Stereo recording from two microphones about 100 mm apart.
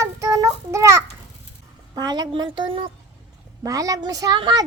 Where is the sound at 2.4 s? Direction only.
55° right (ahead or behind).